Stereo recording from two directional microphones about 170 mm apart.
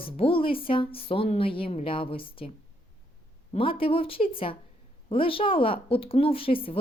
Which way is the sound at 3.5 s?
30° left (ahead or behind).